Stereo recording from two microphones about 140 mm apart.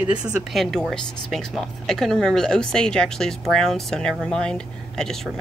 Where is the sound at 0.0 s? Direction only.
5° right (ahead or behind).